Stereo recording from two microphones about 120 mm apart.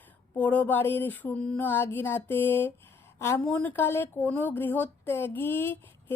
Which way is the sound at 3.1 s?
20° left (ahead or behind).